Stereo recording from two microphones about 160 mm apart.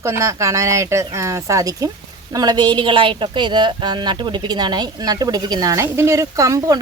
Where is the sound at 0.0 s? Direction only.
15° right (ahead or behind).